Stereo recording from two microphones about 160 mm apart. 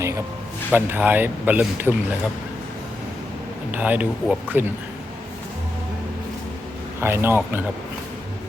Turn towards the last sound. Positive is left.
turn(degrees=-15)  # may be behind; listen again after turning